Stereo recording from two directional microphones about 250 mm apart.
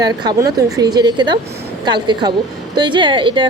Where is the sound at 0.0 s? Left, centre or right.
Centre.